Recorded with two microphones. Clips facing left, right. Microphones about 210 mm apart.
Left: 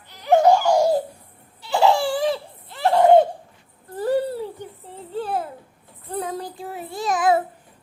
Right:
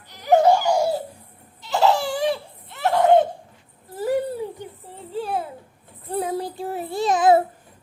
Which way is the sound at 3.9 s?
10° right (ahead or behind).